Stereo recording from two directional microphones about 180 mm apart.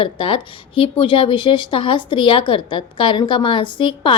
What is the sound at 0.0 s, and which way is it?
Speech, 30° left (ahead or behind).